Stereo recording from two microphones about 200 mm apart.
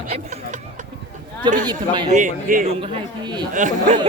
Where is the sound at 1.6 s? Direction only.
20° right (ahead or behind).